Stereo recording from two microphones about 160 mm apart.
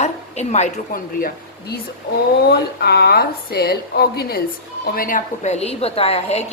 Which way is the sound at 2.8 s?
90° left.